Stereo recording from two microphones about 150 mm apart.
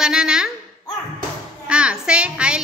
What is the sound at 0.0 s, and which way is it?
Speech, 5° right (ahead or behind).